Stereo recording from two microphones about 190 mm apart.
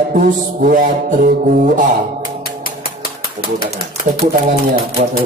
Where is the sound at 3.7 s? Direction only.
35° right (ahead or behind).